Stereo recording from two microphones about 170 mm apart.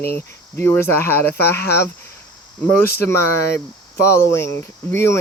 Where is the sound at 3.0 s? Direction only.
15° left (ahead or behind).